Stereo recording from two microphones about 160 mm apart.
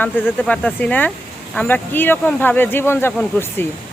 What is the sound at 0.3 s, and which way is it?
Speech, 5° left (ahead or behind).